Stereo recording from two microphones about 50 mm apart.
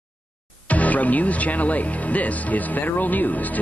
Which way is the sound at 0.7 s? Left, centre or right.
Left.